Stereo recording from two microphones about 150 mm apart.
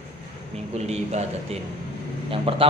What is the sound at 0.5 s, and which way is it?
Speech, 45° right (ahead or behind).